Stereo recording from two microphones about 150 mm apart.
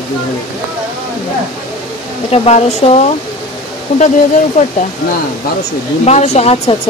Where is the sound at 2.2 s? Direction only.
40° left (ahead or behind).